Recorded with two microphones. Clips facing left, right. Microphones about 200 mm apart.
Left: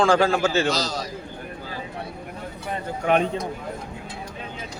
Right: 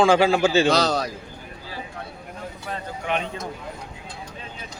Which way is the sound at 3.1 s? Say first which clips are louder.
Left 6 dB; 45° left (ahead or behind).